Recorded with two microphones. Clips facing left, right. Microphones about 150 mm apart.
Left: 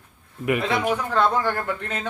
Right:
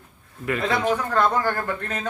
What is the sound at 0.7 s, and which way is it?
Speech, 10° left (ahead or behind).